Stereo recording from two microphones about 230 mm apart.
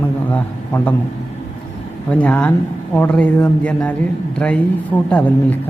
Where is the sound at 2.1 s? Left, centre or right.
Centre.